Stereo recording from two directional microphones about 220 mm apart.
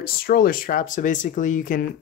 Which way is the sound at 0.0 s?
40° left (ahead or behind).